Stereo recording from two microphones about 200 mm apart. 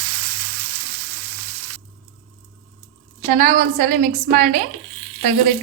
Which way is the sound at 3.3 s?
40° right (ahead or behind).